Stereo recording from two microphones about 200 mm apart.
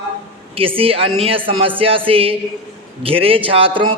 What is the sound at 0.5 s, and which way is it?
A man's voice, 30° right (ahead or behind).